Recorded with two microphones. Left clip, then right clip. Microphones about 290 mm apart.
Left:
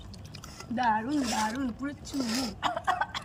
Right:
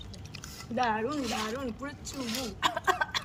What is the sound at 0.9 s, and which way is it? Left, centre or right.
Speech, centre.